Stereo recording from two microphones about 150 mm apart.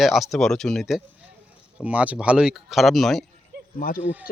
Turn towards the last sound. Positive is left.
turn(degrees=-10)  # may be behind; listen again after turning